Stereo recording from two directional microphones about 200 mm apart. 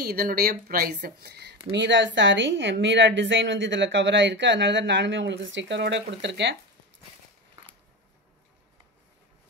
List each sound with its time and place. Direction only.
0.0 s speech: 50° right (ahead or behind)
1.7 s speech: 65° right (ahead or behind)